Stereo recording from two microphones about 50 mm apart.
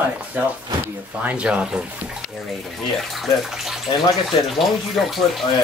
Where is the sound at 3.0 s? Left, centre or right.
Centre.